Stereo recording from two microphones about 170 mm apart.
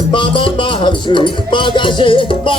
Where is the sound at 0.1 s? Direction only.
30° left (ahead or behind).